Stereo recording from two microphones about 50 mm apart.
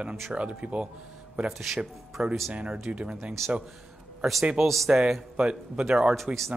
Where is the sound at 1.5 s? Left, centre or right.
Centre.